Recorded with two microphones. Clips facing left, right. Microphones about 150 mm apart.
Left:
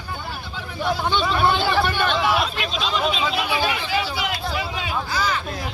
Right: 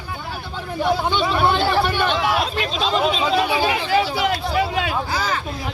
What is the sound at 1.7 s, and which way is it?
Hubbub, 15° right (ahead or behind).